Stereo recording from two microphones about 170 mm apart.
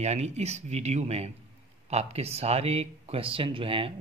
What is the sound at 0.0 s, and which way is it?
Speech, 40° right (ahead or behind).